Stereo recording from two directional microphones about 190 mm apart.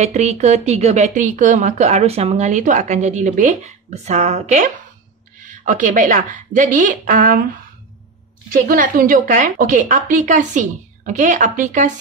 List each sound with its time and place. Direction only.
0.0 s a woman's voice: 35° right (ahead or behind)
8.5 s a woman's voice: 45° right (ahead or behind)